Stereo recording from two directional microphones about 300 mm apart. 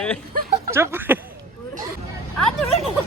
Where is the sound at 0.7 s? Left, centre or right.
Centre.